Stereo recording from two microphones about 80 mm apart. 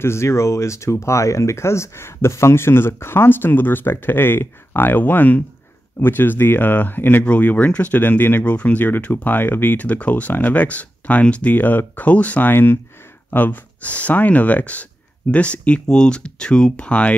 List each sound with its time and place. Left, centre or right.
0.0 s speech: left; by 17.1 s centre